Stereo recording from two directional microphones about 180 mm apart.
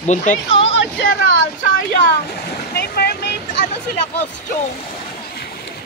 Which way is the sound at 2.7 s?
65° left (ahead or behind).